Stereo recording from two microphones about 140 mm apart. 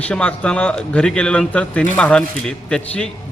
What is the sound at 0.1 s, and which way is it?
A man's voice, 5° left (ahead or behind).